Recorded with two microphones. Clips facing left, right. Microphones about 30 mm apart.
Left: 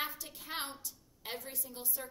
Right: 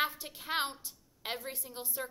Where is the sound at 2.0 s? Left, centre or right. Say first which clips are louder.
Right 8 dB; right.